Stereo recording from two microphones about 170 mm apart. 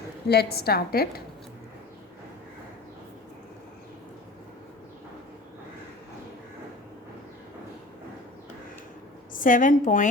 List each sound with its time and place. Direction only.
0.3 s a woman's voice: 70° left (ahead or behind)
9.3 s a woman's voice: 55° left (ahead or behind)